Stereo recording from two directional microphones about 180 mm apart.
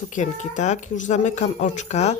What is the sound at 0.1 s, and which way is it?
Speech, 45° left (ahead or behind).